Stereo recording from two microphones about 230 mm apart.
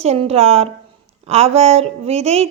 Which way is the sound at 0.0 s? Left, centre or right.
Right.